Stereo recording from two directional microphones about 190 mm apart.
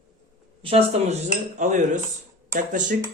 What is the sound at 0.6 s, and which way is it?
Speech, 35° right (ahead or behind).